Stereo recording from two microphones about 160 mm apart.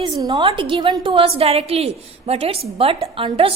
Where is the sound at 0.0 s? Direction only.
25° right (ahead or behind).